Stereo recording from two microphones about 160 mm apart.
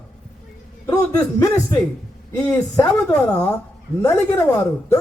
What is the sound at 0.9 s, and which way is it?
A man's voice, 20° left (ahead or behind).